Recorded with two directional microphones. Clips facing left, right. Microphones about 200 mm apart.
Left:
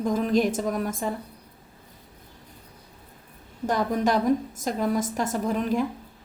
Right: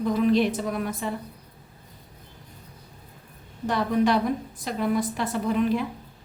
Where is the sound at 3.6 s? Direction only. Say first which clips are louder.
Right 1 dB; 45° left (ahead or behind).